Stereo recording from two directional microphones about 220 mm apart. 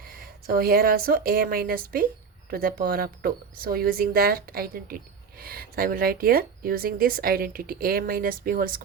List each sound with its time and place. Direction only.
0.1 s a woman's voice: 40° right (ahead or behind)